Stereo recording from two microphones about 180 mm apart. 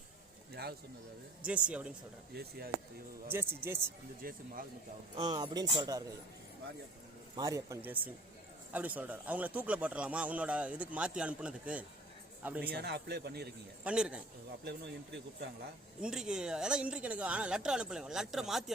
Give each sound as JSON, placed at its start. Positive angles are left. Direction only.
{"t": 0.5, "sound": "a sound", "side_deg": -60}
{"t": 1.5, "sound": "a man's voice", "side_deg": -5}
{"t": 2.3, "sound": "a man's voice", "side_deg": -60}
{"t": 3.3, "sound": "a man's voice", "side_deg": -15}
{"t": 4.2, "sound": "speech", "side_deg": -55}
{"t": 5.1, "sound": "speech", "side_deg": -25}
{"t": 7.3, "sound": "a man's voice", "side_deg": -20}
{"t": 12.7, "sound": "a man's voice", "side_deg": -65}
{"t": 13.8, "sound": "speech", "side_deg": -5}
{"t": 14.6, "sound": "speech", "side_deg": -70}
{"t": 16.0, "sound": "speech", "side_deg": -5}